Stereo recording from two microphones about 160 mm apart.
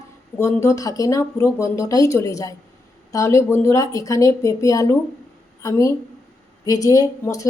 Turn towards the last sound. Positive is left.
turn(degrees=20)  # may be behind; listen again after turning